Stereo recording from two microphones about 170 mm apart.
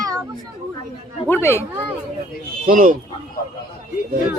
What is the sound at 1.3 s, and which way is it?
Speech, 15° left (ahead or behind).